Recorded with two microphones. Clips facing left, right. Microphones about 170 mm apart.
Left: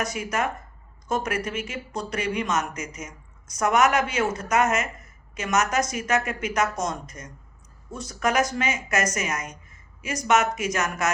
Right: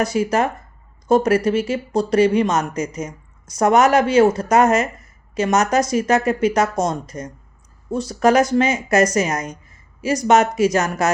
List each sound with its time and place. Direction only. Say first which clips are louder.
0.0 s speech: right 9 dB; 30° right (ahead or behind)